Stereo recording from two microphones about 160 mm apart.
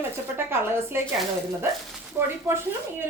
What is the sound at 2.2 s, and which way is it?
Speech, 15° right (ahead or behind).